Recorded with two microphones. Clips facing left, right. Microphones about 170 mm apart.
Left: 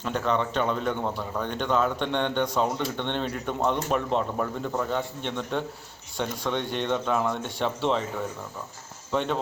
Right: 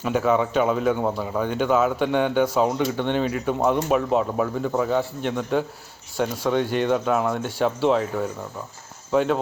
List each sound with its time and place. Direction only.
0.0 s speech: 5° right (ahead or behind)
9.1 s speech: 5° right (ahead or behind)